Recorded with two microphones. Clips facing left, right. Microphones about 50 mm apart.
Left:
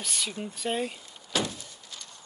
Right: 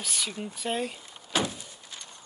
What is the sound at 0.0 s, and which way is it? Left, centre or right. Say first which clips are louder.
Speech: even; centre.